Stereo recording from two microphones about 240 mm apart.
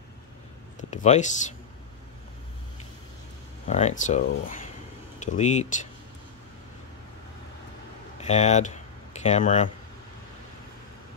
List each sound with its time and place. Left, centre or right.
0.7 s speech: left
3.6 s speech: left
8.2 s speech: left